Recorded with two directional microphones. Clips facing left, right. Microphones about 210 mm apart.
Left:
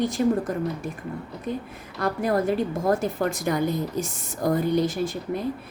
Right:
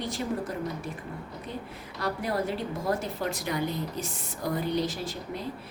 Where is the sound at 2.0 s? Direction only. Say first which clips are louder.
Left 6 dB; 50° left (ahead or behind).